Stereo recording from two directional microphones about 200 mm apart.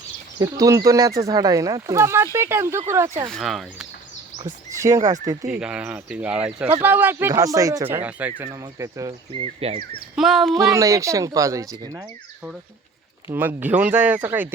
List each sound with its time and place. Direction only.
0.3 s speech: 15° right (ahead or behind)
3.2 s speech: centre (ahead or behind)
4.7 s speech: 15° right (ahead or behind)
5.5 s speech: 5° right (ahead or behind)
9.3 s speech: 30° right (ahead or behind)
10.2 s speech: centre (ahead or behind)
10.5 s speech: 15° right (ahead or behind)
13.2 s speech: 10° right (ahead or behind)